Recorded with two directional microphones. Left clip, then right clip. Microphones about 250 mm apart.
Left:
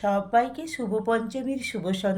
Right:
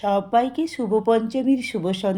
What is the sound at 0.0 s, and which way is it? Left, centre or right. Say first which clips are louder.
A woman's voice: right 3 dB; centre.